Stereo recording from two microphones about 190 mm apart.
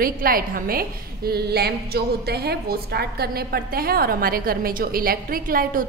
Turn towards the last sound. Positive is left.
turn(degrees=-50)  # may be behind; listen again after turning